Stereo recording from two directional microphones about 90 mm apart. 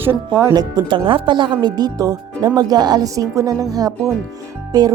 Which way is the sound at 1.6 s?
50° right (ahead or behind).